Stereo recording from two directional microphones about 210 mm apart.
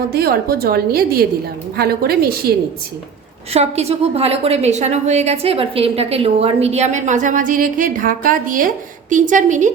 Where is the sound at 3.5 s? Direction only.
30° right (ahead or behind).